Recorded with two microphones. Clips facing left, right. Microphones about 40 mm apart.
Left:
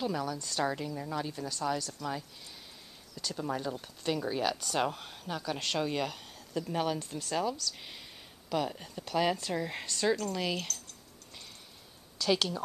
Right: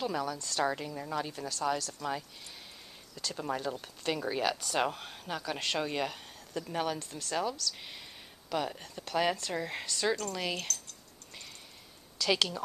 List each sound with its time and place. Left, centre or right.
0.0 s speech: centre
3.3 s speech: centre
7.0 s speech: centre
7.3 s speech: centre
12.2 s speech: centre